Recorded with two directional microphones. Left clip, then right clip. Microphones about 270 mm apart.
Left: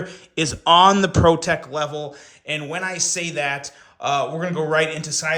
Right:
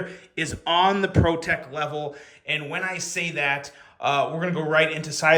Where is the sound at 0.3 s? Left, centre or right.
Centre.